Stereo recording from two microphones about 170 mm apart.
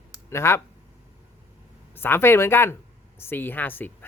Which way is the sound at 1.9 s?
10° left (ahead or behind).